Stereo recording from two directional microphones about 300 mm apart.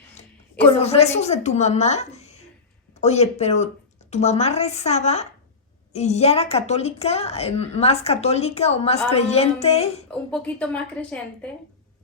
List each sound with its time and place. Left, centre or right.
0.8 s speech: left
10.3 s a woman's voice: centre